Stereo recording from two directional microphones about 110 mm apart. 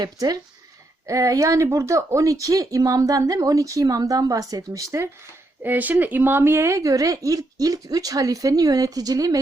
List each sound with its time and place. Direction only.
0.0 s speech: 35° right (ahead or behind)
5.6 s speech: 15° right (ahead or behind); by 9.4 s 35° right (ahead or behind)